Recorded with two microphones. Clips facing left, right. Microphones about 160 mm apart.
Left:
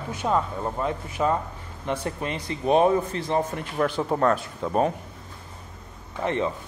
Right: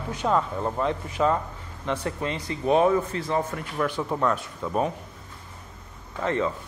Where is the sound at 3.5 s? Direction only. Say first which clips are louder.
Left 2 dB; 30° left (ahead or behind).